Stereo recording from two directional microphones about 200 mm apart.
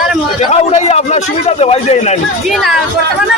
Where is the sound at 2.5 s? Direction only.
Centre (ahead or behind).